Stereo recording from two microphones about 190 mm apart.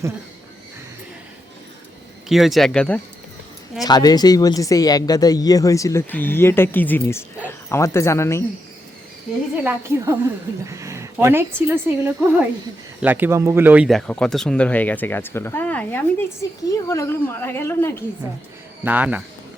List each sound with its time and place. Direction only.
2.3 s speech: centre (ahead or behind)
3.8 s speech: 20° left (ahead or behind)
9.6 s a woman's voice: 15° right (ahead or behind)
13.0 s speech: 10° right (ahead or behind); by 17.9 s 15° left (ahead or behind)
18.9 s a woman's voice: 10° right (ahead or behind)